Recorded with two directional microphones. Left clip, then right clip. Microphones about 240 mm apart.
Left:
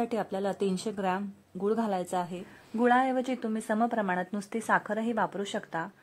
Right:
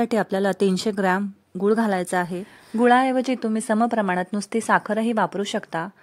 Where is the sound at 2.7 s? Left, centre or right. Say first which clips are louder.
Right 7 dB; right.